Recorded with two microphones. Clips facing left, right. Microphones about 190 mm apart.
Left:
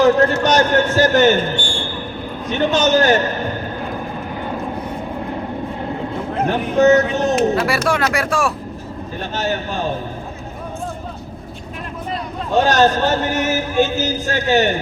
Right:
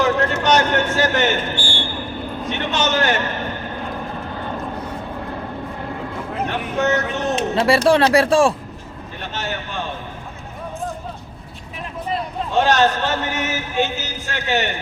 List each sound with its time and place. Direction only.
0.0 s a sound: 40° left (ahead or behind)
0.4 s a man's voice: 40° left (ahead or behind)
1.5 s a man's voice: 5° right (ahead or behind)
2.5 s a man's voice: 40° left (ahead or behind)
6.4 s a man's voice: 40° left (ahead or behind)
7.5 s speech: 30° right (ahead or behind)
9.3 s a man's voice: 40° left (ahead or behind)
12.5 s a man's voice: 40° left (ahead or behind)